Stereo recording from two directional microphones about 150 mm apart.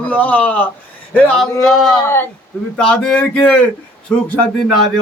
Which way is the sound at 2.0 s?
15° left (ahead or behind).